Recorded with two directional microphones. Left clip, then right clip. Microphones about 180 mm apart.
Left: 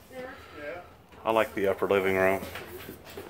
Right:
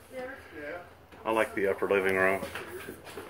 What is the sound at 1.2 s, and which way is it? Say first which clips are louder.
Speech: left 2 dB; 25° left (ahead or behind).